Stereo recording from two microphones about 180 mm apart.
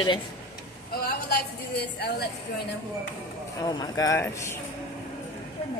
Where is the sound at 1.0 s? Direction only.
65° left (ahead or behind).